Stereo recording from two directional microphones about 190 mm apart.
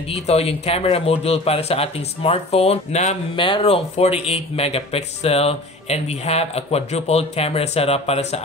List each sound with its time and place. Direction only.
0.0 s speech: 30° left (ahead or behind)